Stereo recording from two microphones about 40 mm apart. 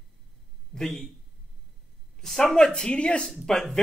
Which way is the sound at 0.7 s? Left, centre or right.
Centre.